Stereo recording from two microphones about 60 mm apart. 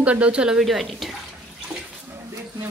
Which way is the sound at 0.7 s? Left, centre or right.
Centre.